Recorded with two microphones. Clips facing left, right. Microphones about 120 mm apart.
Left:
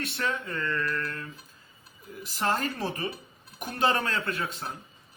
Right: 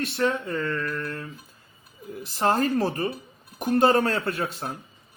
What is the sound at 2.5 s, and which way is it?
Speech, 55° right (ahead or behind).